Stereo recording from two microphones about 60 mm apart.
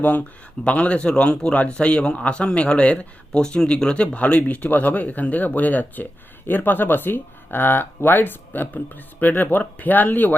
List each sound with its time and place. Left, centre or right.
0.0 s speech: left